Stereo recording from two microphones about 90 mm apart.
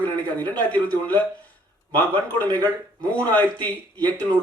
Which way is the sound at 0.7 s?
20° left (ahead or behind).